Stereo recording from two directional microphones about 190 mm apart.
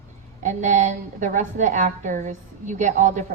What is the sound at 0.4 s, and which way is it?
A woman's voice, 40° right (ahead or behind).